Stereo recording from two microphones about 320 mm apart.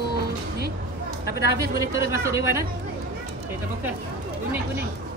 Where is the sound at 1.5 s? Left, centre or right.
Centre.